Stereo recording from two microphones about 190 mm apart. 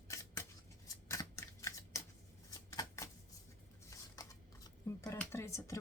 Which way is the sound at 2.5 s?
20° left (ahead or behind).